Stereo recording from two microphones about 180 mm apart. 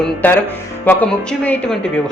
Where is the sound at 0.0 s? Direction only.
10° left (ahead or behind).